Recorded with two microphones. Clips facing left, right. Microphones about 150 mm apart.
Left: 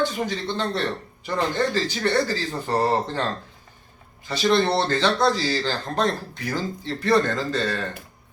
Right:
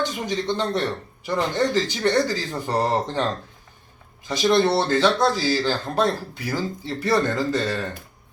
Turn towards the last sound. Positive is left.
turn(degrees=-10)  # may be behind; listen again after turning